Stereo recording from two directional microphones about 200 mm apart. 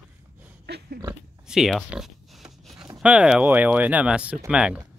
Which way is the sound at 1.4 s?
Centre (ahead or behind).